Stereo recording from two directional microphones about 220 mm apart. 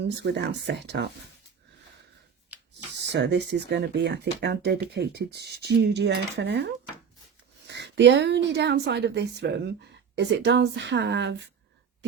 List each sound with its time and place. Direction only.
0.0 s a woman's voice: 50° right (ahead or behind)
3.0 s a woman's voice: 55° right (ahead or behind)
7.7 s a woman's voice: 50° right (ahead or behind)